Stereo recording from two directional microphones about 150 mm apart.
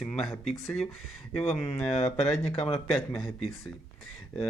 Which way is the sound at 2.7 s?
Centre (ahead or behind).